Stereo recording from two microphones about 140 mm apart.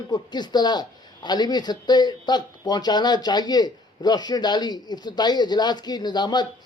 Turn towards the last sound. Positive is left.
turn(degrees=30)  # may be behind; listen again after turning